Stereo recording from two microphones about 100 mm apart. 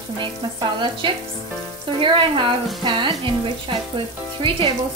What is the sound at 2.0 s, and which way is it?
Speech, 60° right (ahead or behind).